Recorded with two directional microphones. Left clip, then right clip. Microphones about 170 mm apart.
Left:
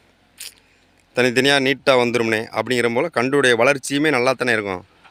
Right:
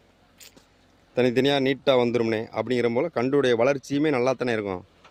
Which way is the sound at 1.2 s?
Centre (ahead or behind).